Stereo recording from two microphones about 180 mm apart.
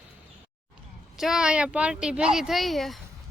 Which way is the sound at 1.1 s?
Centre (ahead or behind).